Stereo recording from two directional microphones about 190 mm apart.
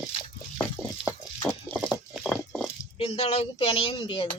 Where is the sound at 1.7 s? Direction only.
5° right (ahead or behind).